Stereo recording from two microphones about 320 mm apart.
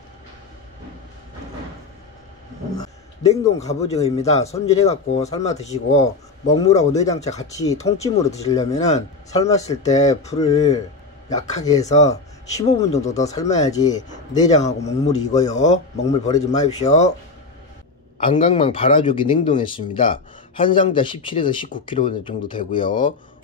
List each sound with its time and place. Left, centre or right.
2.8 s speech: centre
6.9 s speech: centre
8.7 s speech: left
11.6 s speech: centre
15.5 s speech: left
16.1 s speech: centre
16.5 s speech: left
18.1 s speech: centre